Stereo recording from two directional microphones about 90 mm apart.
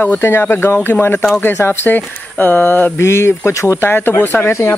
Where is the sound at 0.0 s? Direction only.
20° left (ahead or behind).